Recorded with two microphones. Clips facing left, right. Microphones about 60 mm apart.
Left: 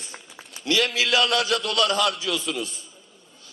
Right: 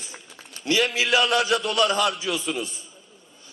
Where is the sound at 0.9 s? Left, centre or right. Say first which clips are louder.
Right 1 dB; centre.